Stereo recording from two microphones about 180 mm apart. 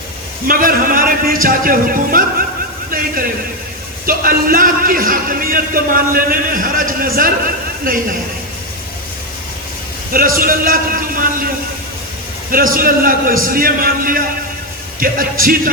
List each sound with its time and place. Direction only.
0.4 s a man's voice: 50° right (ahead or behind)
10.1 s a man's voice: 50° right (ahead or behind)